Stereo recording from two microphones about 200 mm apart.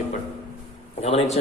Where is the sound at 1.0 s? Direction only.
30° left (ahead or behind).